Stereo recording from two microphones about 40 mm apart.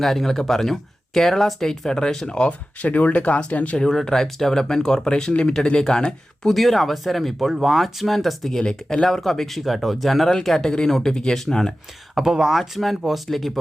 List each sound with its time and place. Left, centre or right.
0.0 s speech: centre
2.3 s speech: left
3.8 s speech: centre
6.5 s speech: centre
8.5 s speech: centre
9.0 s speech: centre
12.1 s speech: centre
12.5 s speech: centre